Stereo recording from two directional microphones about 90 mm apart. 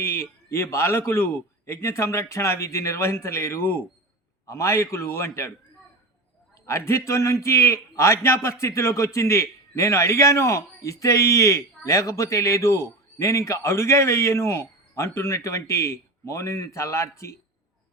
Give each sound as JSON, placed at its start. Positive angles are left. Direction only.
{"t": 0.0, "sound": "a man's voice", "side_deg": 30}
{"t": 6.7, "sound": "a man's voice", "side_deg": 30}